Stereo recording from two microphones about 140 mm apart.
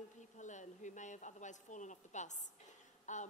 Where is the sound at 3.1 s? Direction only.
60° left (ahead or behind).